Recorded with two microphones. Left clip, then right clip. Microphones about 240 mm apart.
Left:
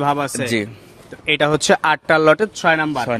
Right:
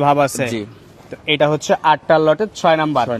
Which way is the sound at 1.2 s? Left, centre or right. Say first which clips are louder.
Even; centre.